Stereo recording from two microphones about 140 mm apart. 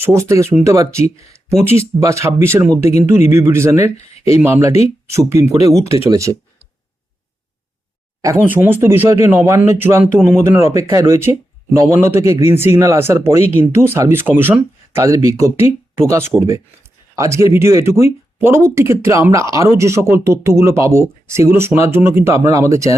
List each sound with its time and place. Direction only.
0.0 s speech: 20° right (ahead or behind)
8.4 s speech: 15° right (ahead or behind)